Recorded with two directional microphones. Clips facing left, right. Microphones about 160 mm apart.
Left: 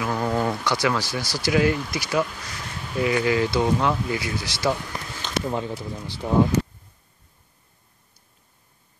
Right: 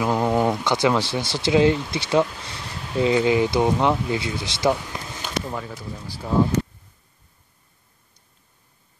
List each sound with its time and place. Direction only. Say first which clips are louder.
0.0 s speech: right 4 dB; 20° right (ahead or behind)
5.5 s speech: left 4 dB; 25° left (ahead or behind)